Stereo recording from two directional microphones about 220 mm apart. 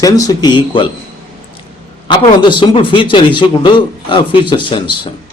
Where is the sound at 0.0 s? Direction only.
15° left (ahead or behind).